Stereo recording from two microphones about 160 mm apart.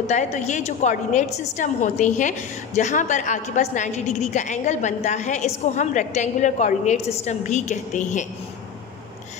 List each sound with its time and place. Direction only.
0.0 s a woman's voice: 45° left (ahead or behind)